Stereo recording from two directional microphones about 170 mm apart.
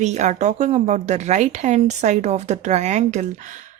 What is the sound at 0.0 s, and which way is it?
Speech, 45° right (ahead or behind).